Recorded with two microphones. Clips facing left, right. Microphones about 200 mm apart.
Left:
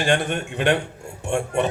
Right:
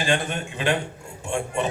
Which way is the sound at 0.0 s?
65° left (ahead or behind).